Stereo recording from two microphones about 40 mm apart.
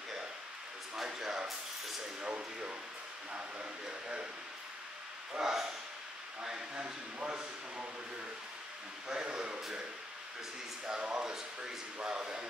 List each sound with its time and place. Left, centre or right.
1.0 s a sound: centre
2.2 s speech: right
3.8 s speech: right
5.4 s speech: centre
6.7 s speech: right
9.1 s speech: right
9.6 s speech: centre
10.9 s speech: right